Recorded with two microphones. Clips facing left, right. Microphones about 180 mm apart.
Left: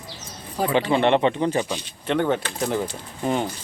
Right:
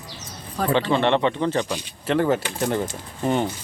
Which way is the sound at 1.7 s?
5° right (ahead or behind).